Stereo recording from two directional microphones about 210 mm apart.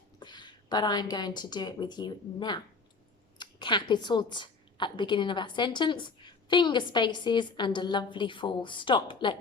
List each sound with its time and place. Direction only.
0.2 s a woman's voice: 20° left (ahead or behind)